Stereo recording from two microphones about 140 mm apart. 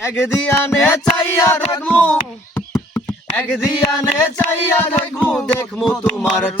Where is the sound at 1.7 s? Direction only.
10° left (ahead or behind).